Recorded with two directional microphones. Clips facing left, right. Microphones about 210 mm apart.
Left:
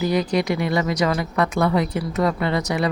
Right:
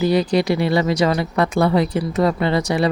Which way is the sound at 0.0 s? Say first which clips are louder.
Right 4 dB; 30° right (ahead or behind).